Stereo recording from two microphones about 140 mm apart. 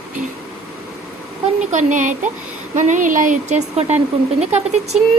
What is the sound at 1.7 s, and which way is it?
Speech, 60° right (ahead or behind).